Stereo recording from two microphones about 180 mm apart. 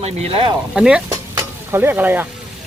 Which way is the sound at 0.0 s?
35° right (ahead or behind).